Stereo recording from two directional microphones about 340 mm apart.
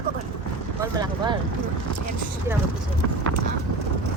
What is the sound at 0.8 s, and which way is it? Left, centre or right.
Speech, centre.